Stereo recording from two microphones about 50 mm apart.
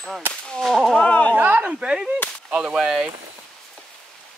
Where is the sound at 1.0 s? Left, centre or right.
Left.